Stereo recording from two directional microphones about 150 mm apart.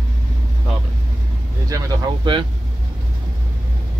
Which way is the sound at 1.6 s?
25° right (ahead or behind).